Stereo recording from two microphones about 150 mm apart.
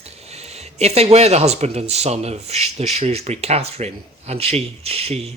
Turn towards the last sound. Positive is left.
turn(degrees=-45)  # may be behind; listen again after turning